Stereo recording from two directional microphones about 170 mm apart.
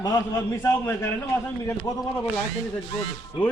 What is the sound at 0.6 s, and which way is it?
Speech, 15° left (ahead or behind).